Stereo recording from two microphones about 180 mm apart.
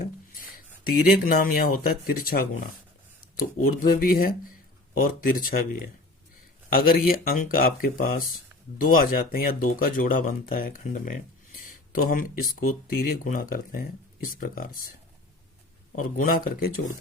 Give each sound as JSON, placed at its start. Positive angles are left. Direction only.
{"t": 0.3, "sound": "a sound", "side_deg": 50}
{"t": 0.9, "sound": "speech", "side_deg": 55}
{"t": 6.7, "sound": "speech", "side_deg": 50}
{"t": 16.0, "sound": "speech", "side_deg": 45}